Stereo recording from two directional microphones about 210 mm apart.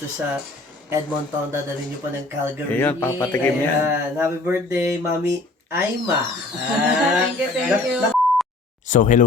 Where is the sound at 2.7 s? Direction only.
10° left (ahead or behind).